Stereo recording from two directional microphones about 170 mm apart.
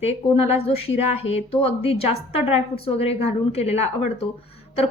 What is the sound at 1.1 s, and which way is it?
Speech, 35° left (ahead or behind).